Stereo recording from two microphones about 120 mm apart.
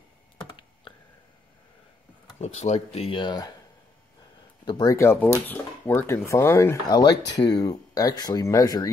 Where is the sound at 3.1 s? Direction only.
40° left (ahead or behind).